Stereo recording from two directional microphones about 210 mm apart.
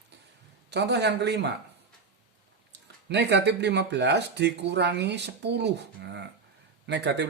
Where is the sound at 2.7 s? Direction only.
55° right (ahead or behind).